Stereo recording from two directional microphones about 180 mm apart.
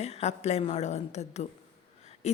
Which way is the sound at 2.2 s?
40° left (ahead or behind).